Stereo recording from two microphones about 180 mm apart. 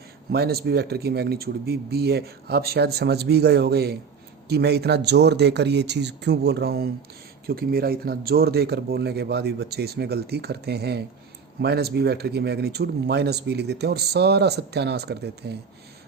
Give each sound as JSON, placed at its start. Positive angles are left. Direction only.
{"t": 0.3, "sound": "speech", "side_deg": -60}